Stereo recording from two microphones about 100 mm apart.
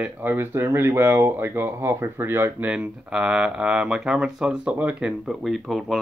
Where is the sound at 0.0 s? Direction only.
20° right (ahead or behind).